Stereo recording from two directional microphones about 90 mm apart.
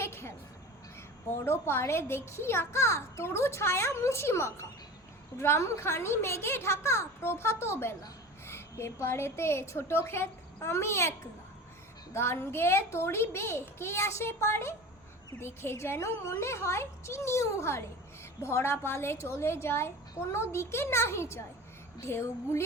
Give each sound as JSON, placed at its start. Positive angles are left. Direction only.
{"t": 0.0, "sound": "a sound", "side_deg": 30}
{"t": 1.5, "sound": "a child's voice", "side_deg": 30}
{"t": 12.1, "sound": "a child's voice", "side_deg": 30}